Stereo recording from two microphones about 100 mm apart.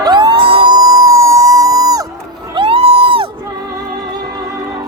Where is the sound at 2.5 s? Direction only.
70° right (ahead or behind).